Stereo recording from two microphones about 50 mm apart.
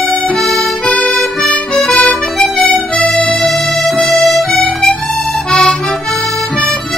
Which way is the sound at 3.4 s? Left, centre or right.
Centre.